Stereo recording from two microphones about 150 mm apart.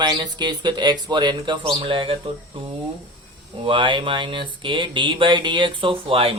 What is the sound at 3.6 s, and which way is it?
Speech, 35° right (ahead or behind).